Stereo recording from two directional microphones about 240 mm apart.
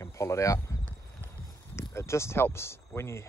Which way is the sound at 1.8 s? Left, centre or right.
Centre.